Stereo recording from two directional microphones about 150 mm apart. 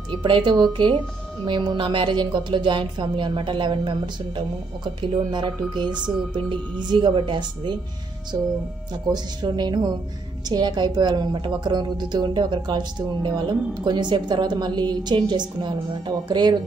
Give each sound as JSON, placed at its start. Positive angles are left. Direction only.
{"t": 0.1, "sound": "speech", "side_deg": -35}
{"t": 5.9, "sound": "speech", "side_deg": -5}
{"t": 6.3, "sound": "a woman's voice", "side_deg": -35}